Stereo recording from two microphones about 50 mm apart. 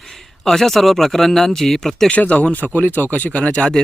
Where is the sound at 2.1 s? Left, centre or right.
Left.